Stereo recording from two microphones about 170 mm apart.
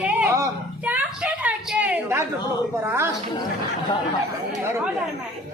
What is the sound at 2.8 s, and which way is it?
Speech, 15° right (ahead or behind).